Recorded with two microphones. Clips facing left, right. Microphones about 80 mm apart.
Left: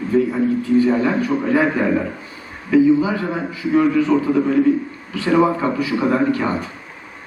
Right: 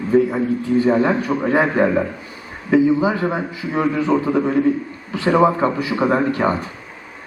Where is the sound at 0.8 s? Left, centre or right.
Right.